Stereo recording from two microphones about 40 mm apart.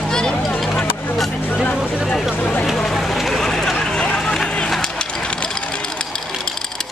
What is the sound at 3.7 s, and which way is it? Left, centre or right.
Run, left.